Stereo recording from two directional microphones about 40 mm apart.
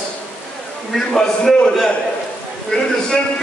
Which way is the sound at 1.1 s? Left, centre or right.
Centre.